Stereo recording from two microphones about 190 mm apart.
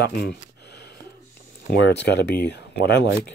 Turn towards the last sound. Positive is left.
turn(degrees=65)  # may be behind; listen again after turning